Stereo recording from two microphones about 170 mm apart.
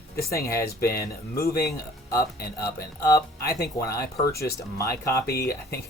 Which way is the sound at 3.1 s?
20° left (ahead or behind).